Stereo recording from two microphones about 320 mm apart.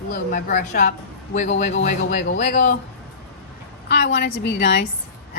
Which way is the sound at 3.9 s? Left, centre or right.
Left.